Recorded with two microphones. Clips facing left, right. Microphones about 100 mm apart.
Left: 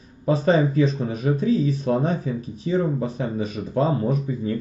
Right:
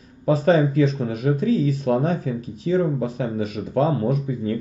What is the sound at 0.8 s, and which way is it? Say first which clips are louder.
Speech: right 1 dB; 65° right (ahead or behind).